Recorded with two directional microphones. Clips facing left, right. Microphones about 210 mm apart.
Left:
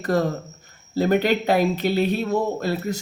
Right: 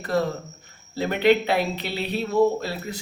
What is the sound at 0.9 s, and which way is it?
Speech, 40° left (ahead or behind).